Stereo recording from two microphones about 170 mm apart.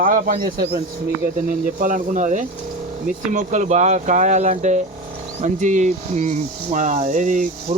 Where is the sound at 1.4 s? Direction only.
50° right (ahead or behind).